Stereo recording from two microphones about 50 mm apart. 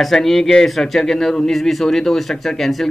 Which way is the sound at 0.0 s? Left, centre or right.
Centre.